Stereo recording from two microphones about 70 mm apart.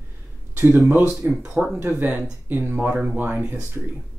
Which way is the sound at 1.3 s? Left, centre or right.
Centre.